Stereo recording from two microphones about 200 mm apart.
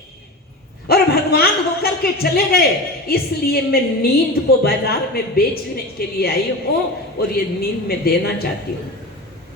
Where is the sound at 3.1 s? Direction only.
50° left (ahead or behind).